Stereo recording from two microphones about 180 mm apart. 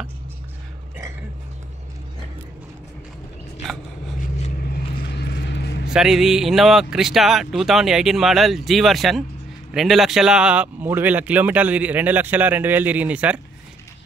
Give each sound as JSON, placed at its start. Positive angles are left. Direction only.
{"t": 3.6, "sound": "a sound", "side_deg": 0}
{"t": 4.6, "sound": "vehicle", "side_deg": 55}
{"t": 5.9, "sound": "speech", "side_deg": 0}